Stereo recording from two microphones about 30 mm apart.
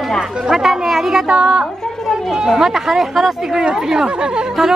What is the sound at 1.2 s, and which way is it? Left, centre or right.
Speech, right.